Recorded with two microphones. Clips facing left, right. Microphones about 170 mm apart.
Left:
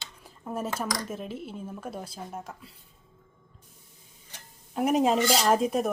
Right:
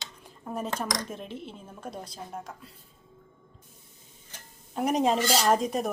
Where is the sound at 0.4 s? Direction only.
5° left (ahead or behind).